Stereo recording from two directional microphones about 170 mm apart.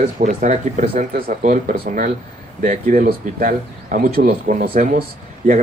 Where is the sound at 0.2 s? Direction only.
50° right (ahead or behind).